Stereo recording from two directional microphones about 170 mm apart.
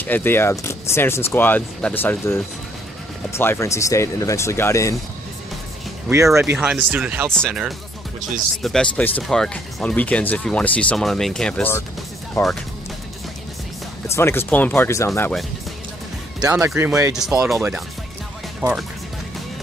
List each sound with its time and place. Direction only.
0.0 s speech: 10° left (ahead or behind)
6.0 s speech: 15° right (ahead or behind)
7.2 s speech: 5° left (ahead or behind)
14.0 s speech: 15° left (ahead or behind)
16.4 s speech: 20° right (ahead or behind)
17.1 s speech: 5° right (ahead or behind)